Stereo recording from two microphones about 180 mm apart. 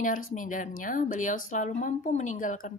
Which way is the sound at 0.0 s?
50° left (ahead or behind).